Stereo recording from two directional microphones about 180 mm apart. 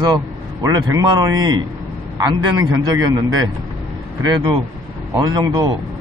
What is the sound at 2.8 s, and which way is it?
Speech, 20° right (ahead or behind).